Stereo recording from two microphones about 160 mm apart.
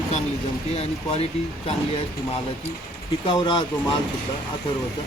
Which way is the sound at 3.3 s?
30° left (ahead or behind).